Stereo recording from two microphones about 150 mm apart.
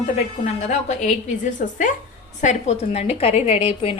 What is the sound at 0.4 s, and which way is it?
A woman's voice, 50° left (ahead or behind).